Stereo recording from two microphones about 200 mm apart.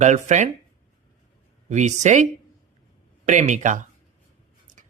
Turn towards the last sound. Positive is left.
turn(degrees=-40)  # may be behind; listen again after turning